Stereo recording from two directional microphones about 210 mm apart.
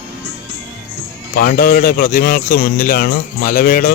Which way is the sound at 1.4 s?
45° left (ahead or behind).